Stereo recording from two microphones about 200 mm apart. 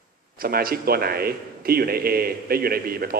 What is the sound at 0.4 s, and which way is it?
A man's voice, 50° right (ahead or behind).